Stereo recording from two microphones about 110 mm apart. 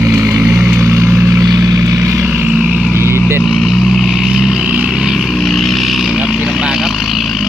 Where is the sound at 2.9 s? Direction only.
25° left (ahead or behind).